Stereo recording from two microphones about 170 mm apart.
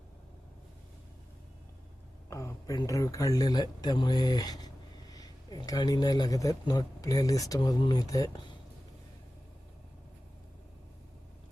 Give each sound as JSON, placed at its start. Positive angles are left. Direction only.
{"t": 2.3, "sound": "speech", "side_deg": 20}